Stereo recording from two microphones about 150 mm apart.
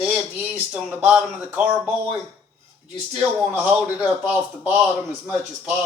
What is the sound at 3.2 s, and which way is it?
Speech, 10° right (ahead or behind).